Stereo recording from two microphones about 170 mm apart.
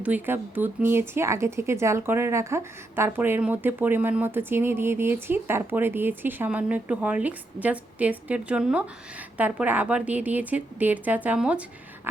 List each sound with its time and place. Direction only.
0.0 s speech: 10° right (ahead or behind)